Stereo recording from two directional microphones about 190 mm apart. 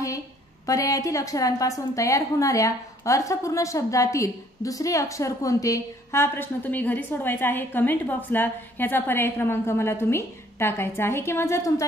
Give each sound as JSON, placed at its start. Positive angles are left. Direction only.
{"t": 0.7, "sound": "a woman's voice", "side_deg": 15}